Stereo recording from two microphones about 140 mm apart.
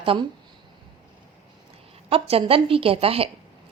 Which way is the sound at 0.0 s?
40° right (ahead or behind).